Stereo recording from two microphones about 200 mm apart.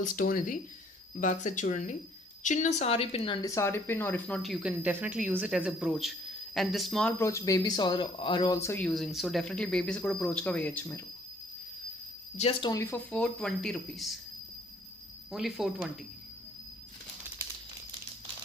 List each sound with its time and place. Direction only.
0.0 s speech: 45° left (ahead or behind); by 7.1 s centre (ahead or behind)
7.2 s speech: 15° left (ahead or behind)
12.4 s speech: 25° left (ahead or behind); by 14.2 s centre (ahead or behind)
15.3 s speech: centre (ahead or behind)